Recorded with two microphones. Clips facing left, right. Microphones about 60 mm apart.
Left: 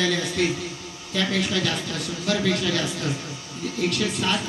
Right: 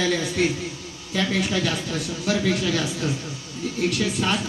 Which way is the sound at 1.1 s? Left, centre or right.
Centre.